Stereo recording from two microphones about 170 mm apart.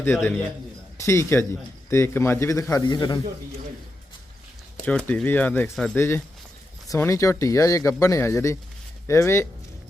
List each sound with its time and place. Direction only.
0.0 s a man's voice: 15° left (ahead or behind)
4.9 s speech: 5° left (ahead or behind)